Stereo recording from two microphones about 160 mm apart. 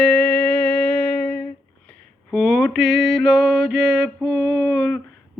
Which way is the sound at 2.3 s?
Centre (ahead or behind).